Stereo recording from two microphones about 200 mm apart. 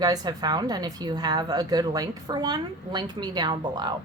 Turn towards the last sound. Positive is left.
turn(degrees=-20)  # may be behind; listen again after turning